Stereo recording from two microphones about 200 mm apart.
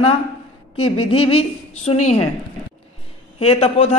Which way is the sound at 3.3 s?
30° left (ahead or behind).